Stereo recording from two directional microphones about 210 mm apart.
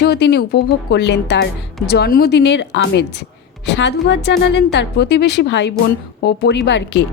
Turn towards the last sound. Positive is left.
turn(degrees=55)  # may be behind; listen again after turning